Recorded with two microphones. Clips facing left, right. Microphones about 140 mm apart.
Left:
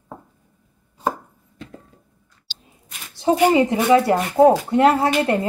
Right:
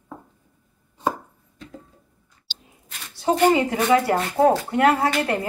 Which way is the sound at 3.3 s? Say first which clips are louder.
Left 2 dB; 10° left (ahead or behind).